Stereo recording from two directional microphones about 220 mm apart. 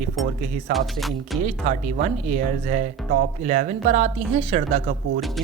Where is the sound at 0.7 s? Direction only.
Centre (ahead or behind).